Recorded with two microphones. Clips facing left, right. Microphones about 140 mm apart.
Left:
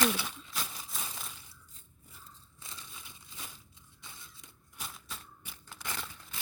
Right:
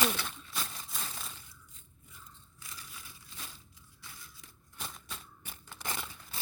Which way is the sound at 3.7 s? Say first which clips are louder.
Even; 25° left (ahead or behind).